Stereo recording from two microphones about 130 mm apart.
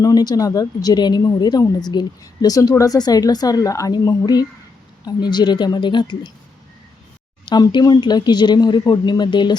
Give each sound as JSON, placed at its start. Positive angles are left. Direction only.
{"t": 0.0, "sound": "speech", "side_deg": 30}
{"t": 7.4, "sound": "speech", "side_deg": 35}